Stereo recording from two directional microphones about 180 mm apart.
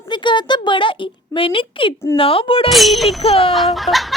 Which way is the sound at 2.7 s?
Centre (ahead or behind).